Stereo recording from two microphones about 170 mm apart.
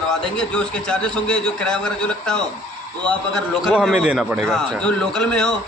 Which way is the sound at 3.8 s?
5° right (ahead or behind).